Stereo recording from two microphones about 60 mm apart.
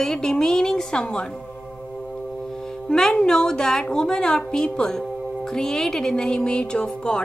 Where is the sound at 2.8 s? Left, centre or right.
Centre.